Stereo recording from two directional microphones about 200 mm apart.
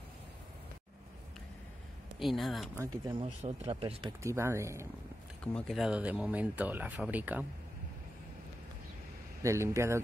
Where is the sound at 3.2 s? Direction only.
30° right (ahead or behind).